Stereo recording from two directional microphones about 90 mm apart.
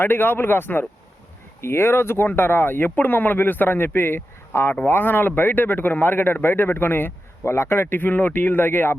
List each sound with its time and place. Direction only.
0.0 s speech: 20° left (ahead or behind)